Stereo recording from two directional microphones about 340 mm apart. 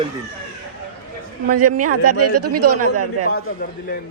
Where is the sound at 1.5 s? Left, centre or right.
Right.